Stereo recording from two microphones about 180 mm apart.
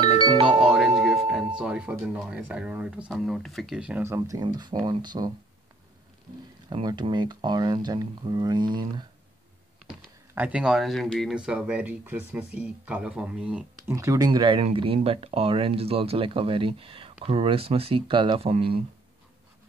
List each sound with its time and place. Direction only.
0.0 s music: 25° right (ahead or behind)
0.5 s music: 5° right (ahead or behind)
1.6 s speech: 5° right (ahead or behind); by 5.3 s 25° right (ahead or behind)
6.7 s speech: 25° right (ahead or behind)
9.8 s speech: 5° right (ahead or behind)
13.9 s speech: 20° right (ahead or behind)